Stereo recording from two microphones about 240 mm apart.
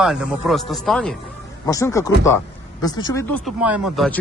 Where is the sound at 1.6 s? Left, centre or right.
Centre.